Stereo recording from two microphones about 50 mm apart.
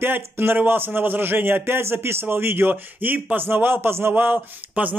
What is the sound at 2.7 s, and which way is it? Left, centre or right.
A man's voice, right.